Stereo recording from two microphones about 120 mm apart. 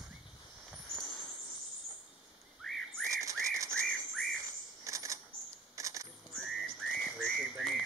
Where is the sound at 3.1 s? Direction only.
25° right (ahead or behind).